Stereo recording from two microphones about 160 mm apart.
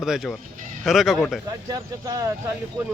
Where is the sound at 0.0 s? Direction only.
Centre (ahead or behind).